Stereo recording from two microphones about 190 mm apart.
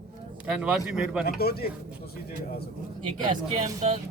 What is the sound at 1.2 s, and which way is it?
Speech, 55° left (ahead or behind).